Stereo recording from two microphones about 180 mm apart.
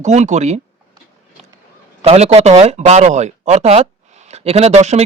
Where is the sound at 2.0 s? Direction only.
35° right (ahead or behind).